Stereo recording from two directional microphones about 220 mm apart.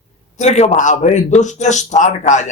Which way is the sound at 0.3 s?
30° left (ahead or behind).